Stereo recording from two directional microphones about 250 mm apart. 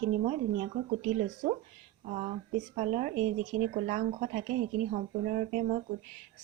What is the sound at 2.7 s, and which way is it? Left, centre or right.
A woman's voice, right.